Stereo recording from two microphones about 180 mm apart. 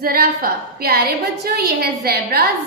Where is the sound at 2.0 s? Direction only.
60° right (ahead or behind).